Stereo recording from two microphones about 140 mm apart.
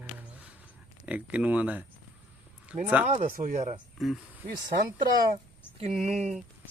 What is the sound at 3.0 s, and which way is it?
Speech, 50° right (ahead or behind).